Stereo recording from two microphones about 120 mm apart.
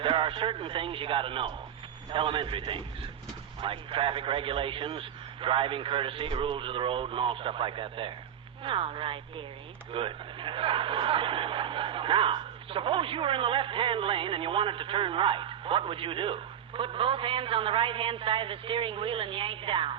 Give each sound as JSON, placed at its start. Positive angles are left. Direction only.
{"t": 0.0, "sound": "speech", "side_deg": -45}